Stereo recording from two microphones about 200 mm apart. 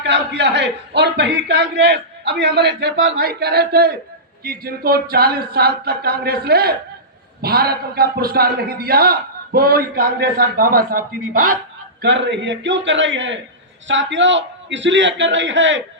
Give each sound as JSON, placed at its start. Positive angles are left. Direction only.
{"t": 0.0, "sound": "a man's voice", "side_deg": -60}
{"t": 12.0, "sound": "a man's voice", "side_deg": -65}